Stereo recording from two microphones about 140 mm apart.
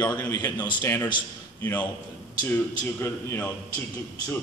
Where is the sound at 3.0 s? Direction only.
15° left (ahead or behind).